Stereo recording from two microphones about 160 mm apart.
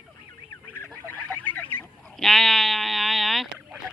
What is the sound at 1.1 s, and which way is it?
Goat, 10° left (ahead or behind).